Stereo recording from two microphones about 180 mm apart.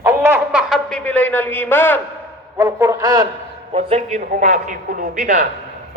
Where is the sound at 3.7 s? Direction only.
35° right (ahead or behind).